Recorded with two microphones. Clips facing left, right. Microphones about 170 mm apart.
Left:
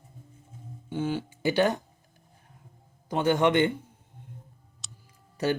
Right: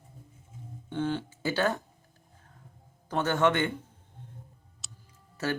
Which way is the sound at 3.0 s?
15° left (ahead or behind).